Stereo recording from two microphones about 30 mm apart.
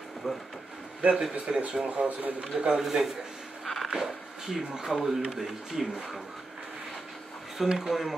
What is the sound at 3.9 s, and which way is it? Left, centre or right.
Speech, centre.